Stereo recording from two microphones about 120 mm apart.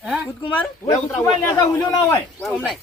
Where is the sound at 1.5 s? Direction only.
30° left (ahead or behind).